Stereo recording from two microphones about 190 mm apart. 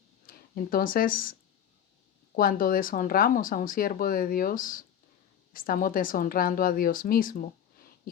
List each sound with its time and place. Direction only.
0.3 s speech: 50° left (ahead or behind)